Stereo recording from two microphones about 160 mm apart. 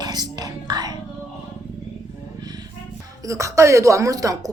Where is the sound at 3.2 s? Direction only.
20° right (ahead or behind).